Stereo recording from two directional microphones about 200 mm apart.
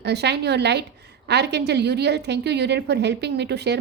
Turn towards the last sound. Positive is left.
turn(degrees=-55)  # may be behind; listen again after turning